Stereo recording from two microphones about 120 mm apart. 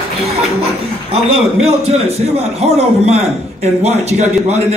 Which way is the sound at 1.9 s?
60° right (ahead or behind).